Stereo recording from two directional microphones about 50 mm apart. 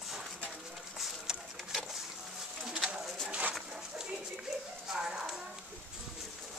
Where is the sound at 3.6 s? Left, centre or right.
Centre.